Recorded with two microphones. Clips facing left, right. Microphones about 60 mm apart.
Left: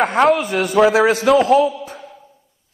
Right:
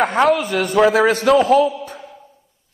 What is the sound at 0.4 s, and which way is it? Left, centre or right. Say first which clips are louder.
Speech: even; centre.